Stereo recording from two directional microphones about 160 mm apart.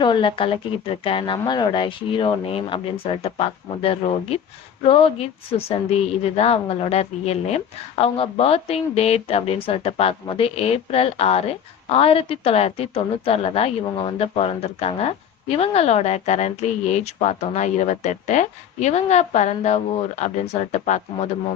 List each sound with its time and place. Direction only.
0.0 s a woman's voice: 30° left (ahead or behind); by 21.2 s 45° left (ahead or behind)